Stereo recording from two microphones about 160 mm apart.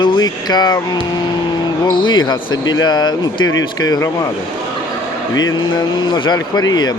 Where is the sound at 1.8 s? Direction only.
30° left (ahead or behind).